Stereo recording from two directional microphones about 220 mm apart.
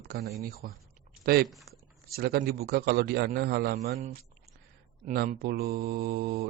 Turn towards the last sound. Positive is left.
turn(degrees=-45)  # may be behind; listen again after turning